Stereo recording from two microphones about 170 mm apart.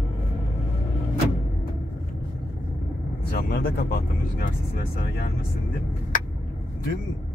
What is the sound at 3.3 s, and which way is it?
Speech, 65° left (ahead or behind).